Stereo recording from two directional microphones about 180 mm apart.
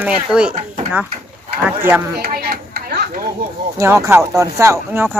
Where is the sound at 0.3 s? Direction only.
5° right (ahead or behind).